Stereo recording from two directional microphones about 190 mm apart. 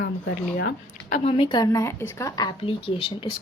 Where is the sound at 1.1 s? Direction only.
30° left (ahead or behind).